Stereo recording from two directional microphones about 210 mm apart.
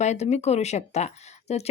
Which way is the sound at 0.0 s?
35° left (ahead or behind).